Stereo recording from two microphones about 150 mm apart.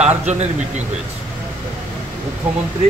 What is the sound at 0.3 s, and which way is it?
Speech, 50° right (ahead or behind).